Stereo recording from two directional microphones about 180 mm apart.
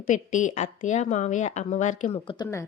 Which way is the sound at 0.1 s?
45° left (ahead or behind).